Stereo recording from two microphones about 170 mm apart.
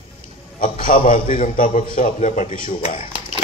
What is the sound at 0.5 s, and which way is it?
A man's voice, 55° left (ahead or behind).